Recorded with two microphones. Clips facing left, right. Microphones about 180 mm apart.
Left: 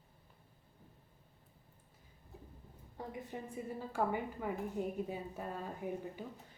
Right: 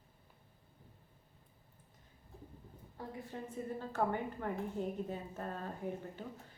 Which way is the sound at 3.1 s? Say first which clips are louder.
Even; 15° left (ahead or behind).